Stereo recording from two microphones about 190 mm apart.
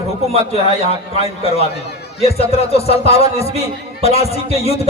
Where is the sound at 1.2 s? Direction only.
30° left (ahead or behind).